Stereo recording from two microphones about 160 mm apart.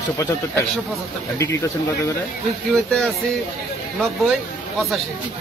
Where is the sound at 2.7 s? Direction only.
5° left (ahead or behind).